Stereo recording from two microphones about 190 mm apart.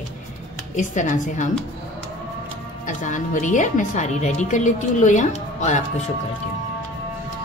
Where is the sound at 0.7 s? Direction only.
40° left (ahead or behind).